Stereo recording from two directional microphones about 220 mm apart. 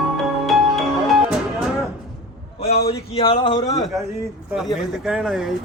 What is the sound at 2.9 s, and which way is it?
Speech, 25° left (ahead or behind).